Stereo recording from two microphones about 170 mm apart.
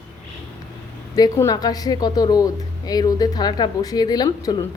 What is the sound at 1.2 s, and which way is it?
A woman's voice, 20° left (ahead or behind).